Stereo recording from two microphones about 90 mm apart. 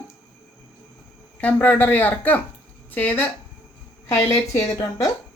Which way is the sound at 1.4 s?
15° left (ahead or behind).